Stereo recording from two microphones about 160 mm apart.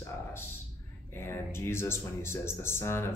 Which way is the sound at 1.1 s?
15° left (ahead or behind).